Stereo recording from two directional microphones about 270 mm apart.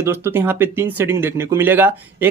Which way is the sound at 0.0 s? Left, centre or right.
Centre.